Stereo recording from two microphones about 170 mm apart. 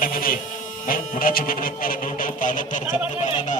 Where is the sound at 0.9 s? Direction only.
55° left (ahead or behind).